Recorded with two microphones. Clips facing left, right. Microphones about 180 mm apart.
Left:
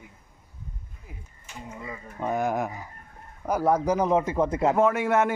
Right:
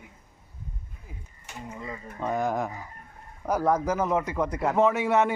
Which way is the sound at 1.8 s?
5° left (ahead or behind).